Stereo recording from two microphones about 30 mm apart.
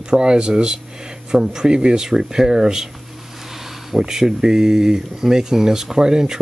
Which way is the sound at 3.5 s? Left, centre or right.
Centre.